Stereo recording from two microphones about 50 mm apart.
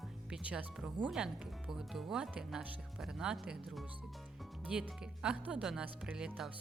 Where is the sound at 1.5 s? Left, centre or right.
Centre.